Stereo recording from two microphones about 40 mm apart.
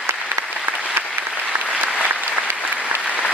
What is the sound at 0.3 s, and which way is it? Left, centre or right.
Applause, right.